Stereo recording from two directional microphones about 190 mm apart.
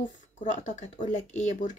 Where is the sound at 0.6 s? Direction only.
40° left (ahead or behind).